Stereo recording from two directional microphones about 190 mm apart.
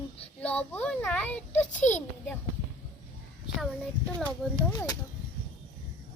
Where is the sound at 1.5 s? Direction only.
40° left (ahead or behind).